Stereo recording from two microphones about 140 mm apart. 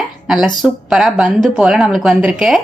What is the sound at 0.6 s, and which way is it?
A woman's voice, centre (ahead or behind).